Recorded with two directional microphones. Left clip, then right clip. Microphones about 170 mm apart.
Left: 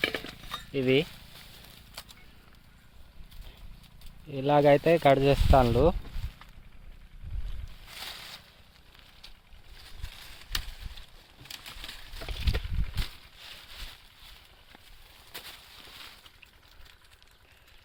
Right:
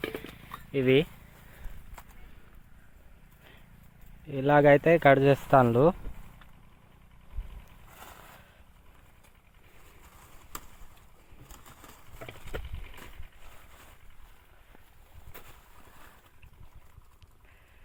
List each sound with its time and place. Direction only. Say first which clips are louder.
0.0 s cutlery: left 6 dB; 55° left (ahead or behind)
0.7 s speech: right 2 dB; 5° left (ahead or behind)
4.3 s speech: right 1 dB; centre (ahead or behind)